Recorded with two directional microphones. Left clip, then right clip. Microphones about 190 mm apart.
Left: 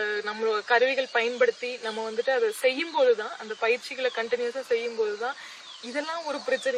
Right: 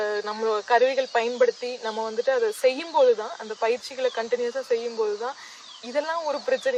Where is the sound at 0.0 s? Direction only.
35° right (ahead or behind).